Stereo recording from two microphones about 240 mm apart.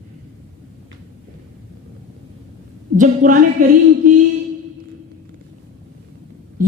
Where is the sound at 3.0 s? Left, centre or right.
Right.